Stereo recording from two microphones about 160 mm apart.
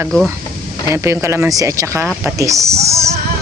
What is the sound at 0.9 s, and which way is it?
Speech, 15° right (ahead or behind).